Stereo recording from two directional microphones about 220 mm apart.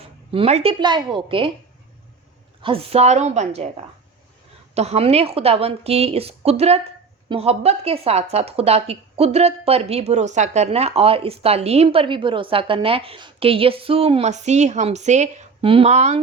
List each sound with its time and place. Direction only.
0.0 s a woman's voice: 25° right (ahead or behind)
2.6 s speech: 25° right (ahead or behind)
4.7 s speech: 30° right (ahead or behind)